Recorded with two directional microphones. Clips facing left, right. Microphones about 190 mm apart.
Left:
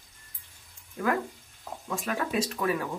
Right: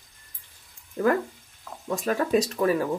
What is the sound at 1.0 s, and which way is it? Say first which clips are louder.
Speech: right 5 dB; 35° right (ahead or behind).